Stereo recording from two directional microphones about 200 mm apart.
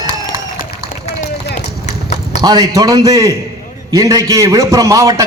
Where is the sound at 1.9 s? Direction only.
35° left (ahead or behind).